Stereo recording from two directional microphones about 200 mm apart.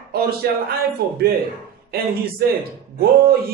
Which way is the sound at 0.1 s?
50° right (ahead or behind).